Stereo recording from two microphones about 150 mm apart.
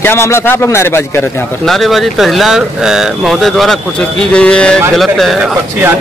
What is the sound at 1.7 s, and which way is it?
Speech, centre (ahead or behind).